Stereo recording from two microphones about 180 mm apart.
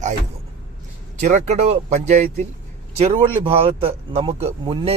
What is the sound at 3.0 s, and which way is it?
Speech, 30° right (ahead or behind).